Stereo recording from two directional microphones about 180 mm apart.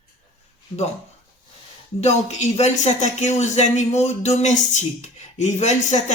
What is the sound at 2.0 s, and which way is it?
Speech, 35° left (ahead or behind).